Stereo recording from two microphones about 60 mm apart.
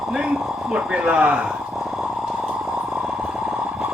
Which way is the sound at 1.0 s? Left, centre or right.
Right.